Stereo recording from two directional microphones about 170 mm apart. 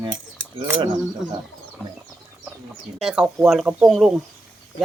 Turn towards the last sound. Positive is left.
turn(degrees=0)  # may be behind; listen again after turning